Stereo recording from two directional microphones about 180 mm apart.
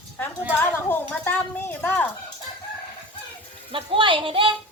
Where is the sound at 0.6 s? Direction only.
10° left (ahead or behind).